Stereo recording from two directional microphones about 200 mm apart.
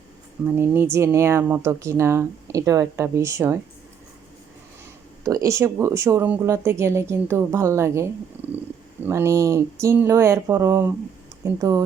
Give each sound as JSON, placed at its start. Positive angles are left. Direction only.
{"t": 0.4, "sound": "speech", "side_deg": -10}
{"t": 5.2, "sound": "speech", "side_deg": -15}
{"t": 9.0, "sound": "speech", "side_deg": -15}